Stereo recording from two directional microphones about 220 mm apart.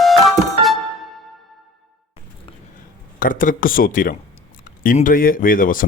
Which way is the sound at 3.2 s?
40° left (ahead or behind).